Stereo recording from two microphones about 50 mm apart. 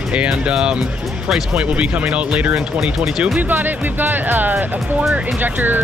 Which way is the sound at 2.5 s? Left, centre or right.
Centre.